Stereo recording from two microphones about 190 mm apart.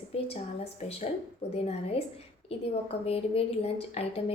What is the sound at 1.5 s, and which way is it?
A woman's voice, 30° left (ahead or behind).